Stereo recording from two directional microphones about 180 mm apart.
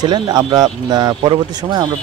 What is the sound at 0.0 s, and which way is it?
Speech, 25° right (ahead or behind).